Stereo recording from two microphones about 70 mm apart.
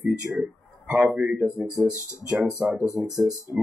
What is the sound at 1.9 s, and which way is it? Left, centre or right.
Speech, left.